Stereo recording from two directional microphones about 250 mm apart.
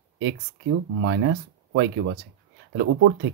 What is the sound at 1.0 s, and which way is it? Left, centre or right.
Speech, right.